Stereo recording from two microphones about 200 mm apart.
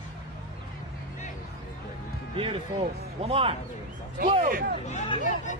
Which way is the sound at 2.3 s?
25° right (ahead or behind).